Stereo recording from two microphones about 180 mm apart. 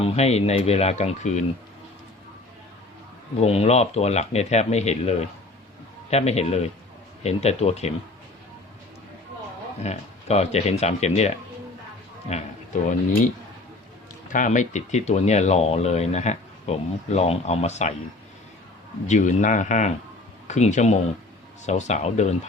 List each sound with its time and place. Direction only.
0.0 s speech: 35° left (ahead or behind)
3.4 s speech: 35° left (ahead or behind)
9.8 s speech: 35° left (ahead or behind)
12.3 s speech: 45° left (ahead or behind)
14.3 s speech: 45° left (ahead or behind)
19.0 s speech: 40° left (ahead or behind)